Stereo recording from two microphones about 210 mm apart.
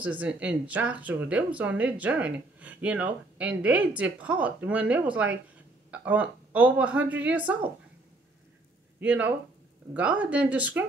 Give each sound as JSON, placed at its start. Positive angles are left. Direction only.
{"t": 0.0, "sound": "speech", "side_deg": -5}
{"t": 9.0, "sound": "speech", "side_deg": -5}